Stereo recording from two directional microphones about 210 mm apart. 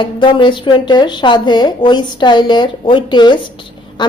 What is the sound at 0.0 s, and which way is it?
A woman's voice, 25° left (ahead or behind).